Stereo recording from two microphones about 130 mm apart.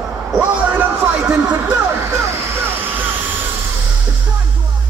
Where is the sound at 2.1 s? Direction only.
15° right (ahead or behind).